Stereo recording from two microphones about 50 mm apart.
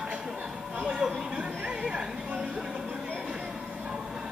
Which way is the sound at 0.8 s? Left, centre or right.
Centre.